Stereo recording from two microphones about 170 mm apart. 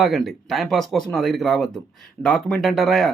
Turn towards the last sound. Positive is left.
turn(degrees=0)  # may be behind; listen again after turning